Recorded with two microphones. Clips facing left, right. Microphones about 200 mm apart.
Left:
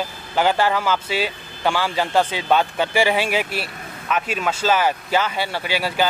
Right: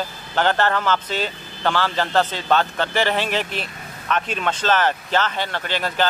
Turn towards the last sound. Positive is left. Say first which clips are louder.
# left 1 dB
turn(degrees=10)  # may be behind; listen again after turning